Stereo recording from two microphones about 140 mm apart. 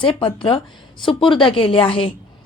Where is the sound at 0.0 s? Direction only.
35° left (ahead or behind).